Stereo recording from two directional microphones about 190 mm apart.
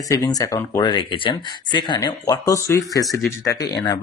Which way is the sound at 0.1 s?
20° left (ahead or behind).